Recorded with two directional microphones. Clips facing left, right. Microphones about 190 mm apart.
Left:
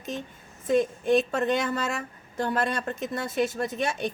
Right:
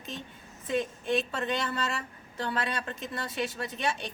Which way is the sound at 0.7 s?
45° left (ahead or behind).